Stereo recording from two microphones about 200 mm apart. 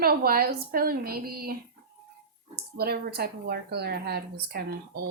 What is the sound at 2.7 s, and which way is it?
A woman's voice, 50° right (ahead or behind).